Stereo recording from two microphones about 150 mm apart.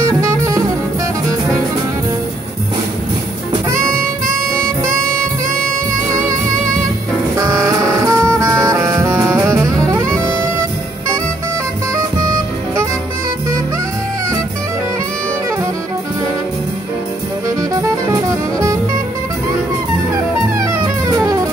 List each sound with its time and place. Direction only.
7.3 s music: 20° right (ahead or behind)
17.6 s music: 20° right (ahead or behind)
20.5 s music: 20° right (ahead or behind)